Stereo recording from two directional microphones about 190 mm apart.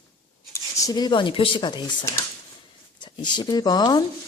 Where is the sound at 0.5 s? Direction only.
20° left (ahead or behind).